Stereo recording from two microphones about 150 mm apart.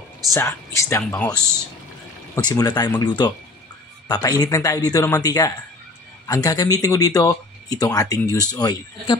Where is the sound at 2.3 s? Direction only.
25° left (ahead or behind).